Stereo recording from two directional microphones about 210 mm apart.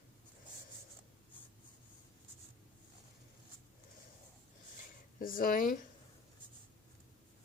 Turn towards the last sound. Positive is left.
turn(degrees=40)  # may be behind; listen again after turning